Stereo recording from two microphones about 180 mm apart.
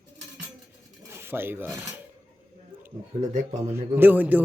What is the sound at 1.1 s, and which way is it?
Speech, 15° right (ahead or behind).